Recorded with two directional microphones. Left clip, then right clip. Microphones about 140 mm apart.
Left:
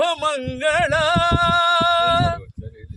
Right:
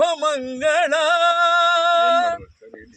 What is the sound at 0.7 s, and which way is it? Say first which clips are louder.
Music: even; 10° left (ahead or behind).